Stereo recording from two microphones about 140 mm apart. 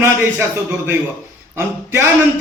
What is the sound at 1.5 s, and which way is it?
Speech, 20° right (ahead or behind).